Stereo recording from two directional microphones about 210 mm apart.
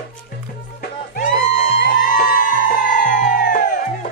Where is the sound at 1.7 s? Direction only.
40° left (ahead or behind).